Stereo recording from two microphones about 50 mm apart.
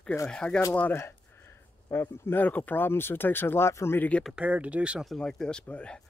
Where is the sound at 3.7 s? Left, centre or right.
Left.